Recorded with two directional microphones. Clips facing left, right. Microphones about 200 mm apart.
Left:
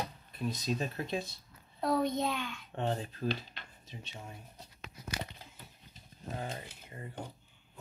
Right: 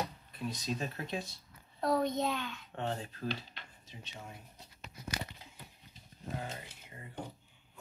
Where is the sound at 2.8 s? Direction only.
35° left (ahead or behind).